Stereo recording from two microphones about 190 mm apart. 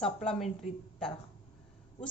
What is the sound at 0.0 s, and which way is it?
A woman's voice, 5° left (ahead or behind).